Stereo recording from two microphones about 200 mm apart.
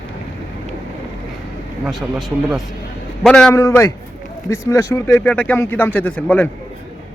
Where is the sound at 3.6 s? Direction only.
15° left (ahead or behind).